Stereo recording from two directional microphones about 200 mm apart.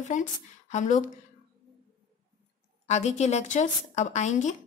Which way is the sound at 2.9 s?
35° left (ahead or behind).